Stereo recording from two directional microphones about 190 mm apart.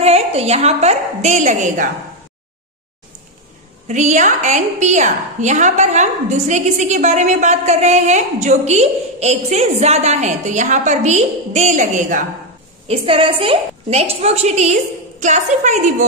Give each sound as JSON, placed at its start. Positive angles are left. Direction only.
{"t": 0.0, "sound": "a woman's voice", "side_deg": -35}
{"t": 3.8, "sound": "a woman's voice", "side_deg": -40}
{"t": 12.8, "sound": "a woman's voice", "side_deg": -30}